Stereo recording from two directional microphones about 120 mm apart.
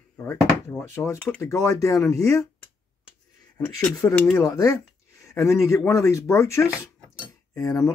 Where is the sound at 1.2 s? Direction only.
10° left (ahead or behind).